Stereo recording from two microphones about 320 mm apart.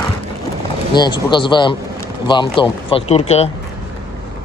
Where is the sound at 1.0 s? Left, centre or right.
Centre.